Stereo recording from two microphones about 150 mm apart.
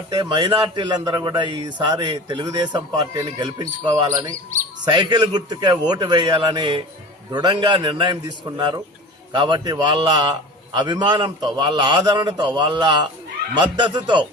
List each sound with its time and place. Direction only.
0.1 s a man's voice: 30° right (ahead or behind)